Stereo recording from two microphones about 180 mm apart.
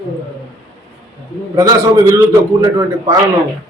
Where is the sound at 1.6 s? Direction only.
15° right (ahead or behind).